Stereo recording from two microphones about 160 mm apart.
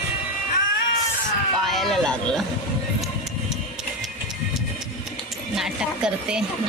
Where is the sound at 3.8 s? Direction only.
5° right (ahead or behind).